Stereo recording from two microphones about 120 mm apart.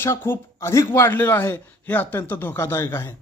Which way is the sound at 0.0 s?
20° left (ahead or behind).